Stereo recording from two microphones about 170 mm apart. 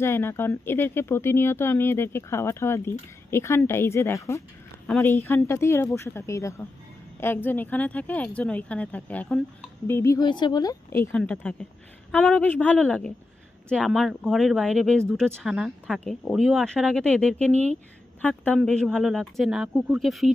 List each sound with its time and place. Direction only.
0.0 s speech: 15° left (ahead or behind); by 20.2 s centre (ahead or behind)